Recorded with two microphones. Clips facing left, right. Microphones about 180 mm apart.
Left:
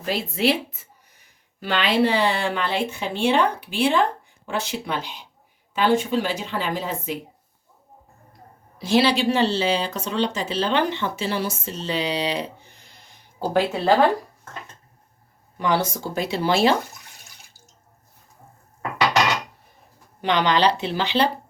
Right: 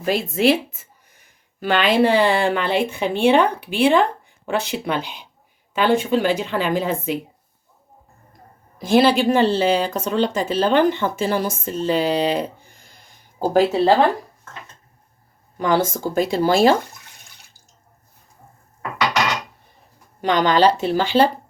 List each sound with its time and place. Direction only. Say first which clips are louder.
0.0 s speech: right 5 dB; 45° right (ahead or behind)
8.8 s speech: right 4 dB; 50° right (ahead or behind)
15.5 s speech: right 4 dB; 45° right (ahead or behind)
20.2 s speech: right 4 dB; 45° right (ahead or behind)